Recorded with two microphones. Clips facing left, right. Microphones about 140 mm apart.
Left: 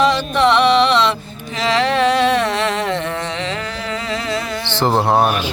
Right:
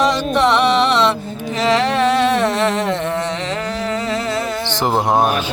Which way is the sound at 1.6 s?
50° right (ahead or behind).